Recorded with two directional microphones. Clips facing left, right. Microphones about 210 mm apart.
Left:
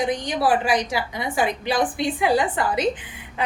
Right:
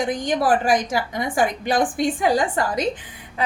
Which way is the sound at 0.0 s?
50° right (ahead or behind).